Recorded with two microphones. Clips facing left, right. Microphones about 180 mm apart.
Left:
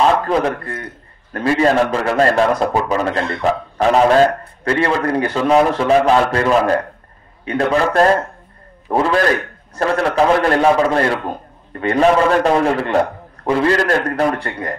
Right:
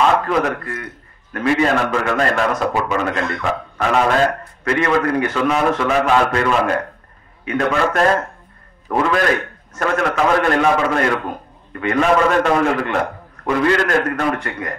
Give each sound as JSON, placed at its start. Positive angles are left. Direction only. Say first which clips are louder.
{"t": 0.3, "sound": "a man's voice", "louder": "left 2 dB", "side_deg": 30}